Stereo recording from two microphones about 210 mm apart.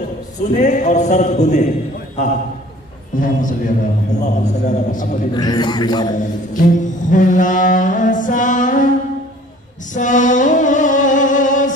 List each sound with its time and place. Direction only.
0.6 s music: 35° left (ahead or behind)
2.1 s a man's voice: 35° left (ahead or behind)
3.2 s music: 40° left (ahead or behind)
5.3 s a man's voice: 20° left (ahead or behind)
6.1 s music: 40° left (ahead or behind)
9.9 s music: 35° left (ahead or behind)